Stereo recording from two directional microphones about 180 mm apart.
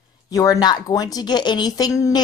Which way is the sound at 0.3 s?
20° left (ahead or behind).